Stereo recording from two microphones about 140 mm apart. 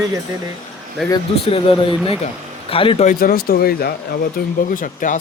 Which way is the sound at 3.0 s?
90° left.